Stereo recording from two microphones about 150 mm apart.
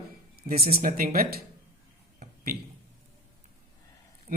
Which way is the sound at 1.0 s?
70° right (ahead or behind).